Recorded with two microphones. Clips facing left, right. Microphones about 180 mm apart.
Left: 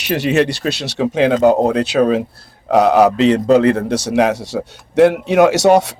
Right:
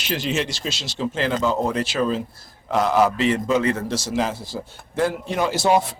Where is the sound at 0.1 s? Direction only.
65° left (ahead or behind).